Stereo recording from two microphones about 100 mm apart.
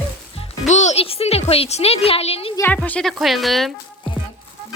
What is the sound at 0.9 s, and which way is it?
Speech, 80° left.